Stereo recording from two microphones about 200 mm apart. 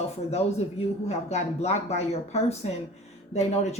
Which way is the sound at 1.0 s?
35° left (ahead or behind).